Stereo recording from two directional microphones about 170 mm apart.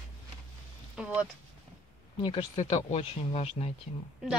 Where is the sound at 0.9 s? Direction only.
5° right (ahead or behind).